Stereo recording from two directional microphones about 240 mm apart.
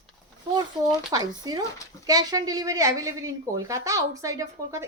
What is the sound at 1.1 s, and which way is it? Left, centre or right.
A woman's voice, centre.